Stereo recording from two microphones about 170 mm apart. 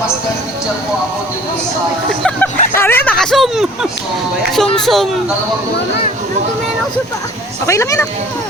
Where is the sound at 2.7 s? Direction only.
15° left (ahead or behind).